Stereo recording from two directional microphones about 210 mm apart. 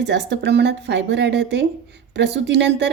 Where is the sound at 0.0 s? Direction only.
55° right (ahead or behind).